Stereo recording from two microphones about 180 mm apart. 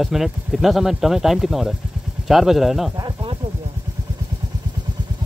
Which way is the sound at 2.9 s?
25° right (ahead or behind).